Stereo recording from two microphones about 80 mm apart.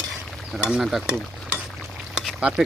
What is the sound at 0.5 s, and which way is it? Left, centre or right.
Stir, centre.